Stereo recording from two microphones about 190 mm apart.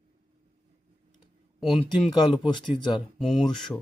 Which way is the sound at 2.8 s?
25° left (ahead or behind).